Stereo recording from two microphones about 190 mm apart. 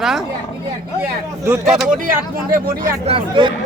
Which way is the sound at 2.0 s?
45° right (ahead or behind).